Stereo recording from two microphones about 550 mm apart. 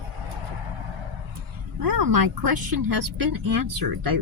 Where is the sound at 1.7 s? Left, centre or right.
Right.